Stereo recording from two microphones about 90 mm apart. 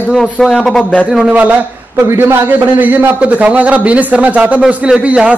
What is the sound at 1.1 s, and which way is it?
Speech, 15° right (ahead or behind).